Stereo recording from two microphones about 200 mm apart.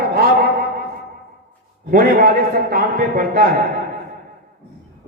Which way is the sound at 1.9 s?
45° right (ahead or behind).